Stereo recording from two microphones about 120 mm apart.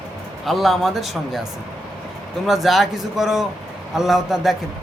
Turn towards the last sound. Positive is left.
turn(degrees=-5)  # may be behind; listen again after turning